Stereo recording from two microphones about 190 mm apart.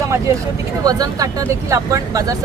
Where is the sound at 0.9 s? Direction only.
20° right (ahead or behind).